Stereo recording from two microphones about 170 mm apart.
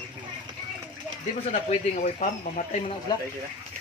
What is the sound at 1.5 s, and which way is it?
Speech, 45° left (ahead or behind).